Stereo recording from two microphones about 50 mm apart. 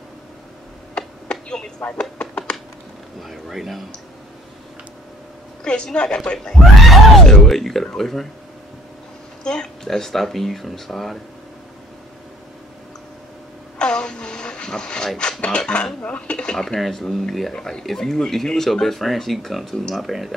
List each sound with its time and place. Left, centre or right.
0.9 s a sound: centre
2.0 s speech: centre
3.2 s speech: centre
5.6 s speech: centre
9.4 s speech: centre
13.7 s vehicle: centre
15.1 s speech: centre
16.5 s speech: centre